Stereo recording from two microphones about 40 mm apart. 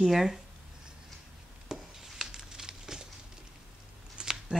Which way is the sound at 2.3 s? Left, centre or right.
Centre.